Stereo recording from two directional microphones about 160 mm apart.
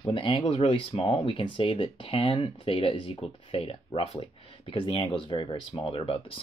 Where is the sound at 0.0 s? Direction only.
35° left (ahead or behind).